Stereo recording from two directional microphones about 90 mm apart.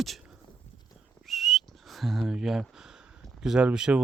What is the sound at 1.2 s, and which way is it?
Whistling, centre (ahead or behind).